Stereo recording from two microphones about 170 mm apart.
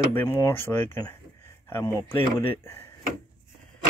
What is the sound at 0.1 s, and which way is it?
Speech, 15° left (ahead or behind).